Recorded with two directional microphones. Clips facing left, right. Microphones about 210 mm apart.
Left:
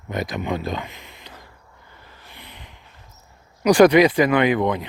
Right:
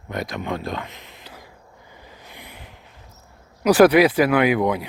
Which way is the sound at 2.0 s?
15° right (ahead or behind).